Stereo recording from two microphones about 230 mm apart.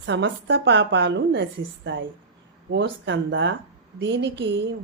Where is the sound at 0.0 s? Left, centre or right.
Right.